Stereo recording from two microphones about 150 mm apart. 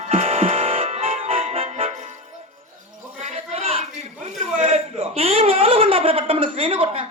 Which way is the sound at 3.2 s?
45° right (ahead or behind).